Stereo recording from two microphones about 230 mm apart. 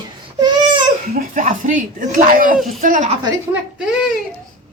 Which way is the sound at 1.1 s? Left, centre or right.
Right.